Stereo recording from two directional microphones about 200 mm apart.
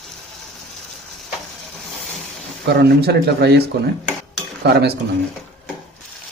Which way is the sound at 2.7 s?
55° right (ahead or behind).